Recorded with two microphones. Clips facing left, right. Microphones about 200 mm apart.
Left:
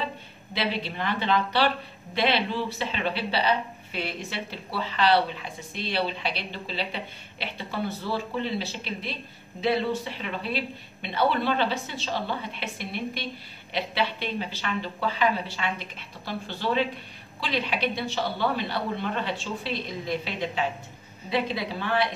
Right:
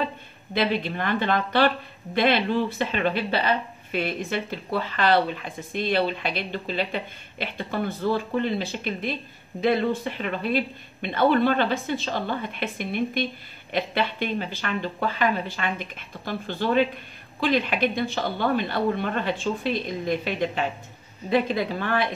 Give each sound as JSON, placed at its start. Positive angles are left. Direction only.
{"t": 0.6, "sound": "speech", "side_deg": -50}